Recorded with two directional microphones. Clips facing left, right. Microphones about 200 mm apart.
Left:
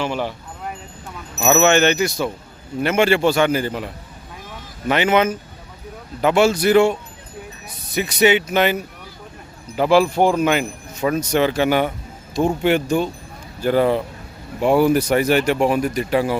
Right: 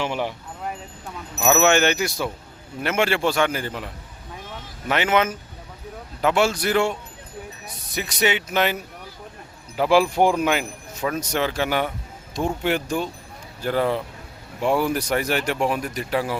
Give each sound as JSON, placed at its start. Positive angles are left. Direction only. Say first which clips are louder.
{"t": 0.0, "sound": "speech", "louder": "left 2 dB", "side_deg": -15}
{"t": 1.4, "sound": "speech", "louder": "left 3 dB", "side_deg": 5}
{"t": 1.6, "sound": "speech", "louder": "left 5 dB", "side_deg": -10}
{"t": 4.9, "sound": "speech", "louder": "left 4 dB", "side_deg": 0}
{"t": 7.9, "sound": "speech", "louder": "left 7 dB", "side_deg": 5}
{"t": 9.7, "sound": "speech", "louder": "left 3 dB", "side_deg": -5}